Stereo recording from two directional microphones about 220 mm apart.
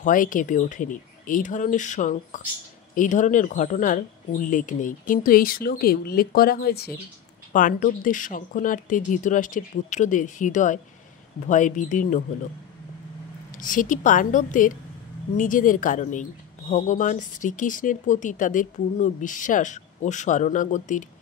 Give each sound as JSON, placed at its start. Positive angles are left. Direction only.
{"t": 0.0, "sound": "speech", "side_deg": 40}
{"t": 13.6, "sound": "speech", "side_deg": 35}